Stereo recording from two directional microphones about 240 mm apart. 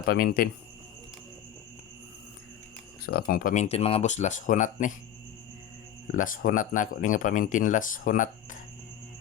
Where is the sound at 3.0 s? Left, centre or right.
Left.